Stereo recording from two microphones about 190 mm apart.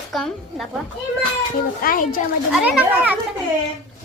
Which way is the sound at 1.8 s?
45° left (ahead or behind).